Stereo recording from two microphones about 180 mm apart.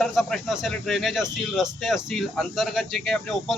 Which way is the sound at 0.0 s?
Centre (ahead or behind).